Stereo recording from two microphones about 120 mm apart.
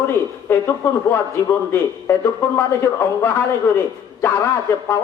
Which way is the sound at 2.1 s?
15° left (ahead or behind).